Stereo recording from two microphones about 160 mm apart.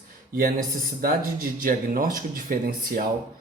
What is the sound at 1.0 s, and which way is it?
Speech, 65° right (ahead or behind).